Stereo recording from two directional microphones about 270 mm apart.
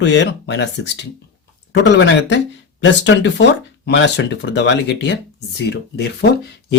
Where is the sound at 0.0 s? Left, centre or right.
Left.